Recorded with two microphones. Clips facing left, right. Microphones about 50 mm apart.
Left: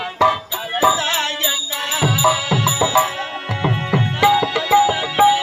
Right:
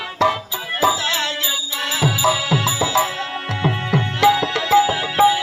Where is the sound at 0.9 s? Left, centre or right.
Left.